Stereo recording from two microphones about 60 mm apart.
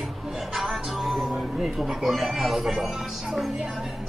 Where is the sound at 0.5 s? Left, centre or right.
Centre.